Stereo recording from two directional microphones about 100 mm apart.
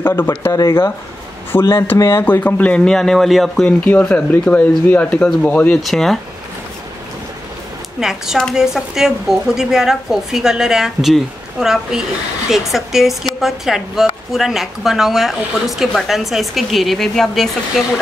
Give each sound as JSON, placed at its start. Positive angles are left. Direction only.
{"t": 0.0, "sound": "speech", "side_deg": 20}
{"t": 0.5, "sound": "speech", "side_deg": 35}
{"t": 1.5, "sound": "speech", "side_deg": 25}
{"t": 2.4, "sound": "speech", "side_deg": 15}
{"t": 3.6, "sound": "speech", "side_deg": 15}
{"t": 8.0, "sound": "speech", "side_deg": -5}